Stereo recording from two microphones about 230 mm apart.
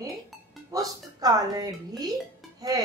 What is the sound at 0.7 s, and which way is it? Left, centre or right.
Speech, centre.